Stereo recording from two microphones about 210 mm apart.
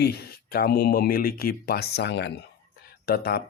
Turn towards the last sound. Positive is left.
turn(degrees=45)  # may be behind; listen again after turning